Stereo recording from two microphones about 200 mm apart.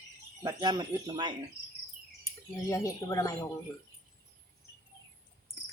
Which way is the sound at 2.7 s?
15° left (ahead or behind).